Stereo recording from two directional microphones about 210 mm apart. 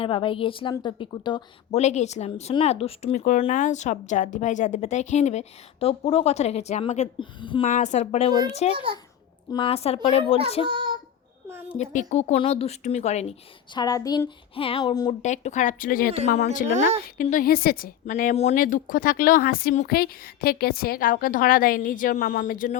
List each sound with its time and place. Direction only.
0.0 s a woman's voice: 25° left (ahead or behind)
1.8 s a woman's voice: 35° left (ahead or behind)
7.7 s a woman's voice: 35° left (ahead or behind)
10.7 s child singing: 20° right (ahead or behind)
11.8 s speech: 35° left (ahead or behind)
13.7 s a woman's voice: 20° left (ahead or behind)
15.2 s speech: 35° left (ahead or behind)
16.7 s speech: 35° right (ahead or behind)
17.2 s speech: 40° left (ahead or behind)